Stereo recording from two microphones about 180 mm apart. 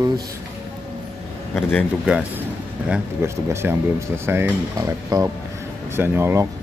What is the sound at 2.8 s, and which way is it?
Speech, 10° right (ahead or behind).